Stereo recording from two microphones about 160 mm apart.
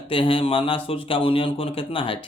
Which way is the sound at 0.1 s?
35° left (ahead or behind).